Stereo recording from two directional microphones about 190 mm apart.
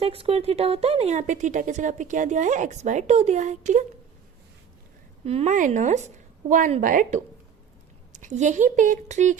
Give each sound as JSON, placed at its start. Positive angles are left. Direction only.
{"t": 0.0, "sound": "a woman's voice", "side_deg": -30}
{"t": 5.2, "sound": "a woman's voice", "side_deg": -35}